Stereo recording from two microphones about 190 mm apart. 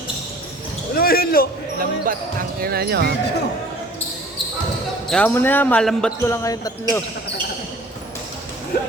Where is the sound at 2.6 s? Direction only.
55° right (ahead or behind).